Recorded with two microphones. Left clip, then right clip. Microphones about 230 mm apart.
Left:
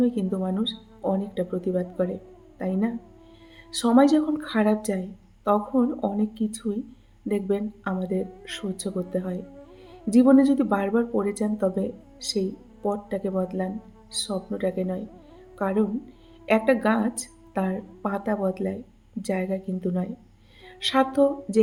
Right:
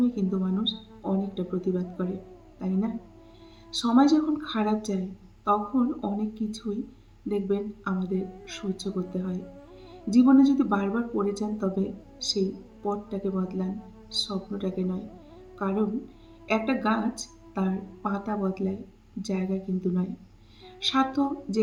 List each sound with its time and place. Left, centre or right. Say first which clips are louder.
0.0 s speech: left 3 dB; left